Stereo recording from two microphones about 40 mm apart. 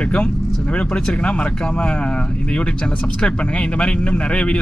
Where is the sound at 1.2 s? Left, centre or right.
Left.